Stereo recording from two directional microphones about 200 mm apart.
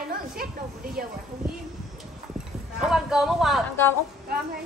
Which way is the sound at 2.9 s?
Centre (ahead or behind).